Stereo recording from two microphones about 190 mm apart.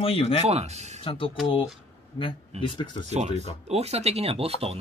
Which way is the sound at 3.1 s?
35° right (ahead or behind).